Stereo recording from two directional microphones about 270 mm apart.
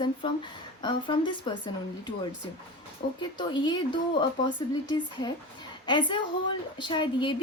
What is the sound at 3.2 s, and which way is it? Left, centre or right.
A woman's voice, centre.